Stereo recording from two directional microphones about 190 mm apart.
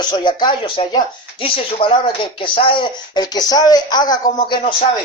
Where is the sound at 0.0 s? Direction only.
20° left (ahead or behind).